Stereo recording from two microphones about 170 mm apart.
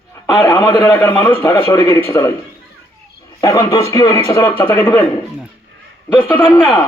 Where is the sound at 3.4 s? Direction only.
20° left (ahead or behind).